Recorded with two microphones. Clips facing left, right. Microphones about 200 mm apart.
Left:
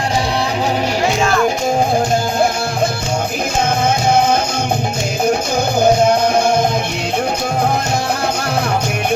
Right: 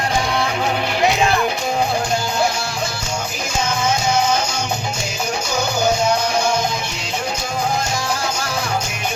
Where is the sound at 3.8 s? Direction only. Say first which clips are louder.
Left 4 dB; 55° left (ahead or behind).